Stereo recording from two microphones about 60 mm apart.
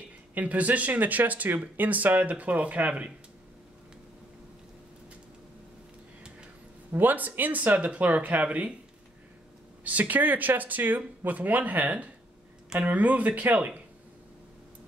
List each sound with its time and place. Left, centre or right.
0.3 s speech: right
6.9 s speech: right
9.8 s speech: right